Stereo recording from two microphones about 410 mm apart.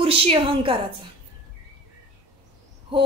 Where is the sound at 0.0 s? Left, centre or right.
Centre.